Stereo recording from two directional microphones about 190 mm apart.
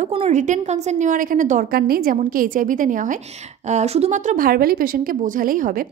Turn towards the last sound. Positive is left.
turn(degrees=-45)  # may be behind; listen again after turning